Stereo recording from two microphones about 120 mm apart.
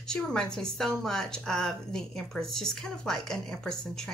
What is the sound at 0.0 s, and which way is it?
A woman's voice, 5° left (ahead or behind).